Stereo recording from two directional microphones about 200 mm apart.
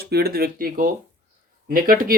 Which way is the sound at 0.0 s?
50° right (ahead or behind).